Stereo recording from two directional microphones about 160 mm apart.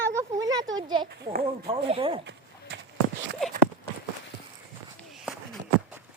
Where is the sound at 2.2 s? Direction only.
90° right.